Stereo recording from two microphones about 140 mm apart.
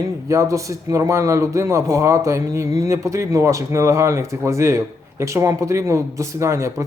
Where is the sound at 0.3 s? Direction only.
20° right (ahead or behind).